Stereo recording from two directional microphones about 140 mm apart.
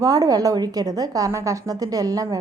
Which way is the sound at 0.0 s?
25° right (ahead or behind).